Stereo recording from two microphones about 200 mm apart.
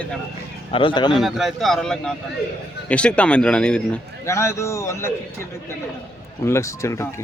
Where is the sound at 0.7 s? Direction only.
25° left (ahead or behind).